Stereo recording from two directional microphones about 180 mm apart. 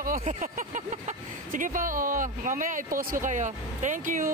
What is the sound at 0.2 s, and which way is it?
Speech, 40° right (ahead or behind).